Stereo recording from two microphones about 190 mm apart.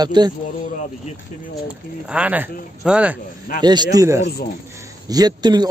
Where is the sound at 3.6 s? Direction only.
20° right (ahead or behind).